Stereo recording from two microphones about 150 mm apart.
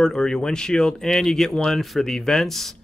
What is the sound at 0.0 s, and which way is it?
Speech, 5° left (ahead or behind).